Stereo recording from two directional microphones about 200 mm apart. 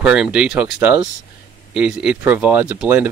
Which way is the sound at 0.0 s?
5° right (ahead or behind).